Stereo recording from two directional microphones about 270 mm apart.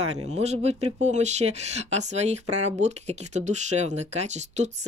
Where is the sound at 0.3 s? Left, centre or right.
Right.